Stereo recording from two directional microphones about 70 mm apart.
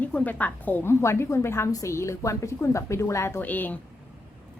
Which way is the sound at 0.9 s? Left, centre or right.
Left.